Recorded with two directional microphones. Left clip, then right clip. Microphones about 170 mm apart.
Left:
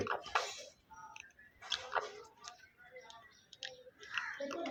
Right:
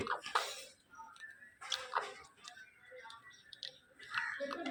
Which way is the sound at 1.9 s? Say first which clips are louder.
Even; 20° left (ahead or behind).